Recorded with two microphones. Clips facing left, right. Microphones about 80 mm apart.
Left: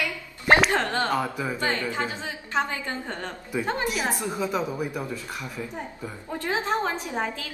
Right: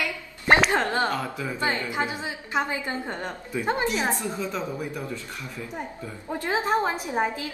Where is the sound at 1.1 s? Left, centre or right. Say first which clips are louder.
Left 3 dB; centre.